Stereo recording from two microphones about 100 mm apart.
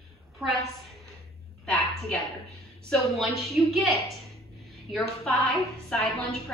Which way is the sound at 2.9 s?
Centre (ahead or behind).